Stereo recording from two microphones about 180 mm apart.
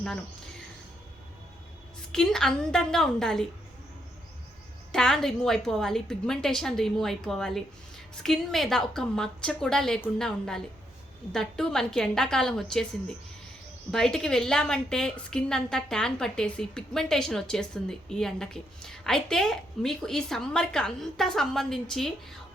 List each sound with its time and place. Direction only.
2.1 s a woman's voice: 5° left (ahead or behind)
4.9 s a woman's voice: 5° left (ahead or behind)
13.9 s a woman's voice: 5° left (ahead or behind)